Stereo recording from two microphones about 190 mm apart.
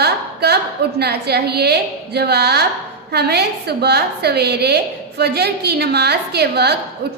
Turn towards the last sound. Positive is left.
turn(degrees=-60)  # may be behind; listen again after turning